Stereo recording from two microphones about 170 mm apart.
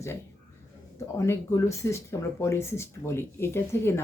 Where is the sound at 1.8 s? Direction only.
15° left (ahead or behind).